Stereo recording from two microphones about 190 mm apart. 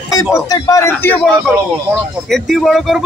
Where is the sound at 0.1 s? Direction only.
20° left (ahead or behind).